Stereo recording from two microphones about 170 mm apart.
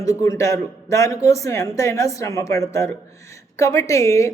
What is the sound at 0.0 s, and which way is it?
A woman's voice, 20° left (ahead or behind).